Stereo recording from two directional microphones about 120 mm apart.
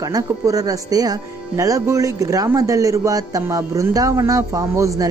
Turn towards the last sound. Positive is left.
turn(degrees=-25)  # may be behind; listen again after turning